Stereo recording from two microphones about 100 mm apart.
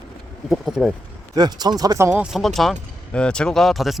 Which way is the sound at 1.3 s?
45° right (ahead or behind).